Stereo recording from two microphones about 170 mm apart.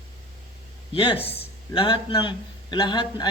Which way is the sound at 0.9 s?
35° left (ahead or behind).